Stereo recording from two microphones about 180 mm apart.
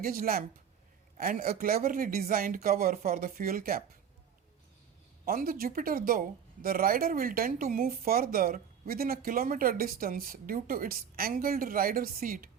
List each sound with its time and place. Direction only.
0.0 s speech: 55° right (ahead or behind)
5.2 s speech: 55° right (ahead or behind)